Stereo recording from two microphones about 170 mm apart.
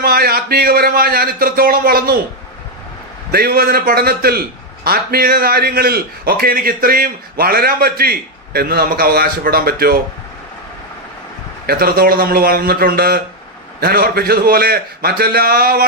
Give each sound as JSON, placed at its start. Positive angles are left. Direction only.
{"t": 0.0, "sound": "a man's voice", "side_deg": -60}
{"t": 3.3, "sound": "a man's voice", "side_deg": -60}
{"t": 11.6, "sound": "a man's voice", "side_deg": -65}